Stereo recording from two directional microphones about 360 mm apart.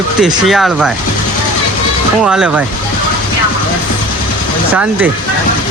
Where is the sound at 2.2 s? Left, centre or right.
Centre.